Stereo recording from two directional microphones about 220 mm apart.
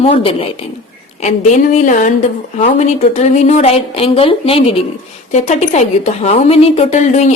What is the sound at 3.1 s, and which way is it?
A woman's voice, 30° left (ahead or behind).